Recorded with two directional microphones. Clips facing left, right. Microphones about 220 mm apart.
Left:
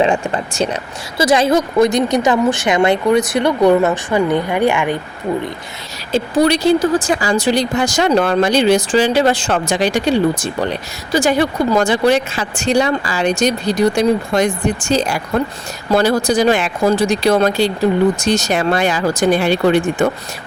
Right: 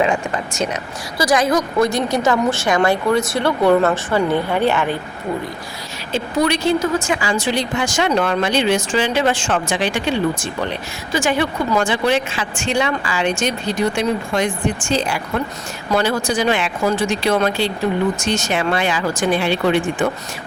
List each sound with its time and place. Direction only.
0.0 s a woman's voice: 30° left (ahead or behind); by 4.9 s 15° left (ahead or behind)
6.1 s speech: 35° left (ahead or behind)